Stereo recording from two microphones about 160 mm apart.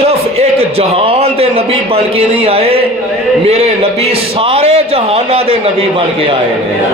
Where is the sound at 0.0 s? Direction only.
40° right (ahead or behind).